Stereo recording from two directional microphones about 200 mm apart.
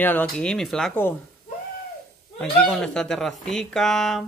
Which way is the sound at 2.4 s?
5° left (ahead or behind).